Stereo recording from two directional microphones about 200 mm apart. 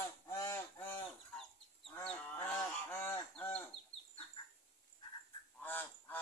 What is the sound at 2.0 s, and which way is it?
Goose, 5° left (ahead or behind).